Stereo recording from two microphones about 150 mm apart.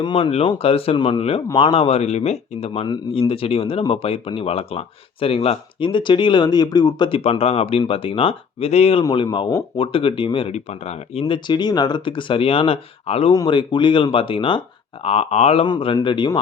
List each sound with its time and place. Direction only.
0.0 s speech: 35° left (ahead or behind)
2.8 s speech: 35° left (ahead or behind)
9.0 s speech: 30° left (ahead or behind)
13.3 s speech: 30° left (ahead or behind)
15.6 s speech: 35° left (ahead or behind)